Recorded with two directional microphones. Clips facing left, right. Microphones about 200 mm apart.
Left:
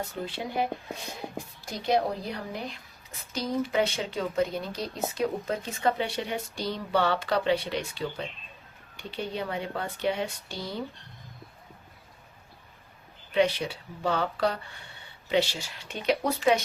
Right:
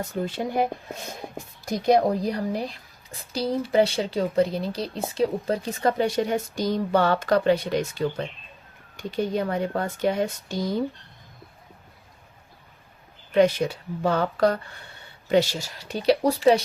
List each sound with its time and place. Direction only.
0.1 s speech: 45° right (ahead or behind)
1.8 s a woman's voice: 45° right (ahead or behind)
13.3 s a woman's voice: 45° right (ahead or behind)